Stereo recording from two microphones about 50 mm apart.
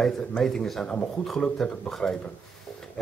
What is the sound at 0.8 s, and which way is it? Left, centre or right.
Speech, left.